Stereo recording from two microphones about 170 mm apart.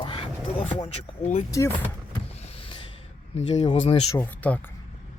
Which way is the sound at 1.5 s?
20° left (ahead or behind).